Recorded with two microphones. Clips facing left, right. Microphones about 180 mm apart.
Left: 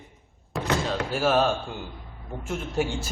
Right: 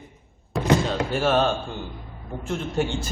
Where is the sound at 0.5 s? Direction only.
Centre (ahead or behind).